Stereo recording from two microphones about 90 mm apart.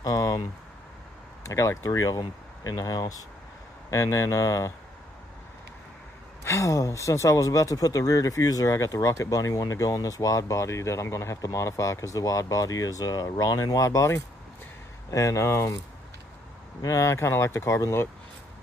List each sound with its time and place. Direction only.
0.0 s a sound: 45° left (ahead or behind)
1.4 s speech: 35° left (ahead or behind)
6.4 s speech: 35° left (ahead or behind)
16.8 s speech: 35° left (ahead or behind)